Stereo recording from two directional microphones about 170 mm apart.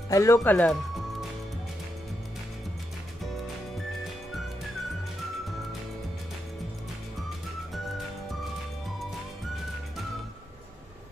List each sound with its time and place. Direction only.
0.1 s speech: 20° left (ahead or behind)